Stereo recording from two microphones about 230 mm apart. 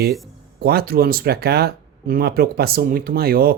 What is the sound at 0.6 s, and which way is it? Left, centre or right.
Speech, right.